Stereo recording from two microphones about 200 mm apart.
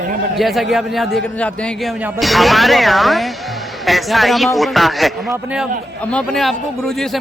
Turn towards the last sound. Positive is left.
turn(degrees=0)  # may be behind; listen again after turning